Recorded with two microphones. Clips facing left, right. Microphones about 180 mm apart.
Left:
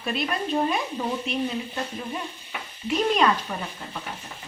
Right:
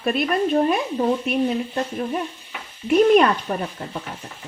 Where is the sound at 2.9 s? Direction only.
60° right (ahead or behind).